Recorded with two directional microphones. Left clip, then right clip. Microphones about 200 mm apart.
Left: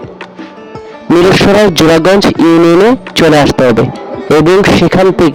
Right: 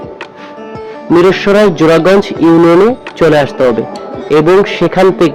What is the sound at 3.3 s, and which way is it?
Speech, 50° left (ahead or behind).